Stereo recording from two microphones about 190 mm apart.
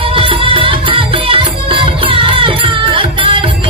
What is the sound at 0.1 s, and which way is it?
Music, 30° right (ahead or behind).